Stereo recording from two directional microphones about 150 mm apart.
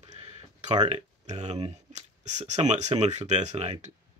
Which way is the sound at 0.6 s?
45° right (ahead or behind).